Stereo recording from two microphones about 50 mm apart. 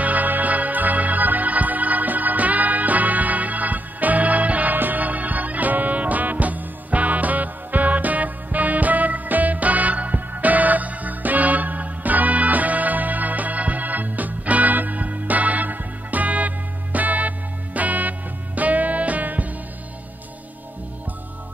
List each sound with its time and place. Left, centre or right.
0.0 s music: right